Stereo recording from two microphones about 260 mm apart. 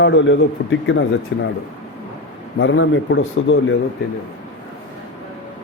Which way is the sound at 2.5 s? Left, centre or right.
Left.